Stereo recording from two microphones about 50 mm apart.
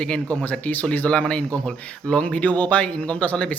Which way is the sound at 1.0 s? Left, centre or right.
Left.